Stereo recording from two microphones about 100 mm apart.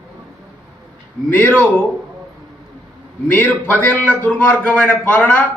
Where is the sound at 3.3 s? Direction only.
20° left (ahead or behind).